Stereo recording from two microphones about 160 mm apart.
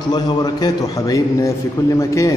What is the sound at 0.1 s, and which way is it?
A man's voice, 25° left (ahead or behind).